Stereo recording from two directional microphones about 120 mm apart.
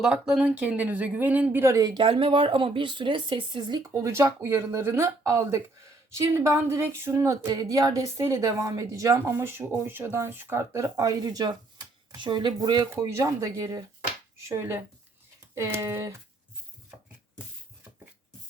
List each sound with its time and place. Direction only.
0.0 s speech: 5° right (ahead or behind); by 12.9 s 35° right (ahead or behind)
12.9 s speech: 25° right (ahead or behind)